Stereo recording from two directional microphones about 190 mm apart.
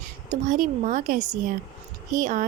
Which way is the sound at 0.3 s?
40° right (ahead or behind).